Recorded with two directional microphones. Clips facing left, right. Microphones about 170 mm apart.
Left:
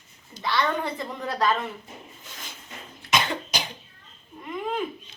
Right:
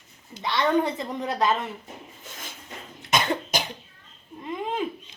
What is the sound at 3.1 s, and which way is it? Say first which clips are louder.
Cough: right 2 dB; 50° right (ahead or behind).